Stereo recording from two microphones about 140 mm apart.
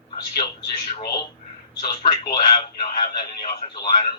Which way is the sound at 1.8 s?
40° left (ahead or behind).